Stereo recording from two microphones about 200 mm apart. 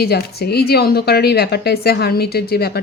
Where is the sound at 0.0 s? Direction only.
50° left (ahead or behind).